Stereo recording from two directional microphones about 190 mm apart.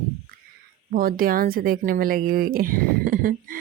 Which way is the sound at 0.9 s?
50° right (ahead or behind).